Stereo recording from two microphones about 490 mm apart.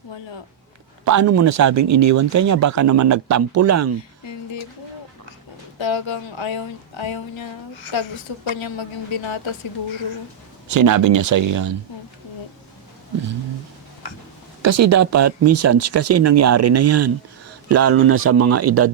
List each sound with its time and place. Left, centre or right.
1.0 s speech: right
5.8 s a woman's voice: left
10.8 s speech: right
14.6 s speech: right